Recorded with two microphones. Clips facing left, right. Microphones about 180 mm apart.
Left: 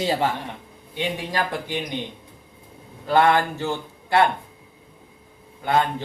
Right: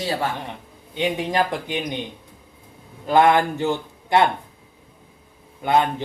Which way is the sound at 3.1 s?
15° right (ahead or behind).